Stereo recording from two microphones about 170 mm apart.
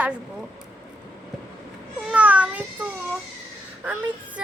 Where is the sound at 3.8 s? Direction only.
10° right (ahead or behind).